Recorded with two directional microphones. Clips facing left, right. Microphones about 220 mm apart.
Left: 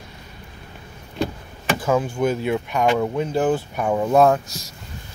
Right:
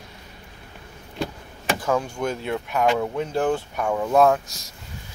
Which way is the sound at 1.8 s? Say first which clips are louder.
Left 5 dB; 5° left (ahead or behind).